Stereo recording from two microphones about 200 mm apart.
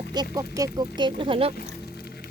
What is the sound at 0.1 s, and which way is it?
Speech, 20° right (ahead or behind).